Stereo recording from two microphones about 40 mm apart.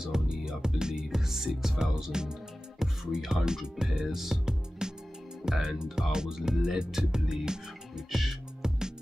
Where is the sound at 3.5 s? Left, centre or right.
Centre.